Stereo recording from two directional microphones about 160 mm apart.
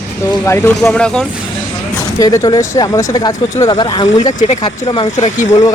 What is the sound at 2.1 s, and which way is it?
Speech, 20° left (ahead or behind).